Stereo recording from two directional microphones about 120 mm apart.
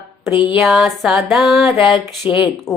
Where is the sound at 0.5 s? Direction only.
Centre (ahead or behind).